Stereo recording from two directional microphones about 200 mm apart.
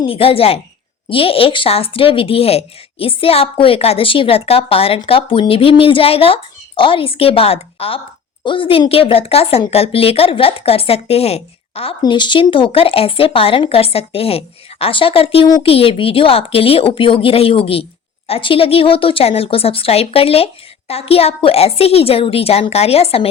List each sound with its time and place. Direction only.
0.0 s a woman's voice: 30° left (ahead or behind)